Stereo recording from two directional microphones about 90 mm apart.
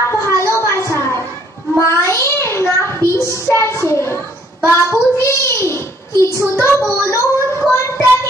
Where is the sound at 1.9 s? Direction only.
30° left (ahead or behind).